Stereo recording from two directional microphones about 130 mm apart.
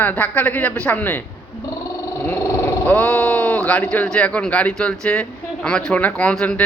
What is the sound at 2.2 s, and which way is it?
A man's voice, 15° left (ahead or behind).